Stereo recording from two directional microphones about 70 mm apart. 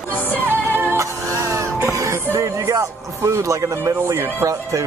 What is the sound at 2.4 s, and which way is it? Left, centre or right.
Speech, right.